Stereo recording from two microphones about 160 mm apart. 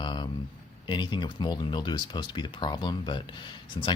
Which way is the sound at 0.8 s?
30° left (ahead or behind).